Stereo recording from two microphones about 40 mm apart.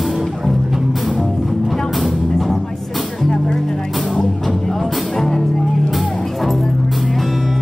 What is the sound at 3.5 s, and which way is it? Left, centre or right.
Music, centre.